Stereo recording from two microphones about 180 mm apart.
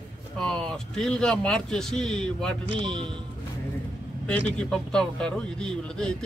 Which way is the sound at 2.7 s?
25° right (ahead or behind).